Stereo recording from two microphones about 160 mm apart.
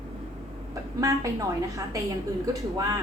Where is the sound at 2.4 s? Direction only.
20° right (ahead or behind).